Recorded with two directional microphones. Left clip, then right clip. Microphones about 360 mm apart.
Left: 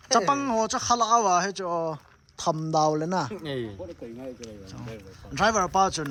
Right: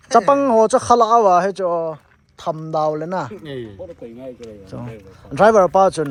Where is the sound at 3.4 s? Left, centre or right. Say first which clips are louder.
Right 2 dB; left.